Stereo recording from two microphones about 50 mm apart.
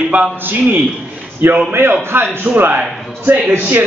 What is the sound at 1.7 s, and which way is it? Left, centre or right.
Speech, right.